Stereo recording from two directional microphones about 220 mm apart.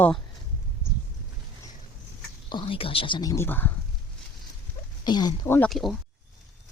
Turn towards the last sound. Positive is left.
turn(degrees=0)  # may be behind; listen again after turning